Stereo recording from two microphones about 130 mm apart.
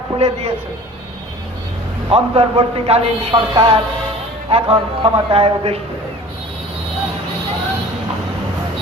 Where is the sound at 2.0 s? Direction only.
50° right (ahead or behind).